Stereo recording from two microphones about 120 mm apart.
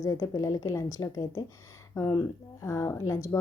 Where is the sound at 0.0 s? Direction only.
25° left (ahead or behind).